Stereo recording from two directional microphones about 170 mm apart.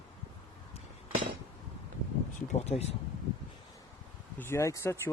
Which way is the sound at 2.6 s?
40° left (ahead or behind).